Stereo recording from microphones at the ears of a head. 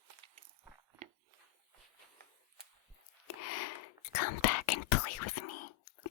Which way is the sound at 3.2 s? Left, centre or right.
Left.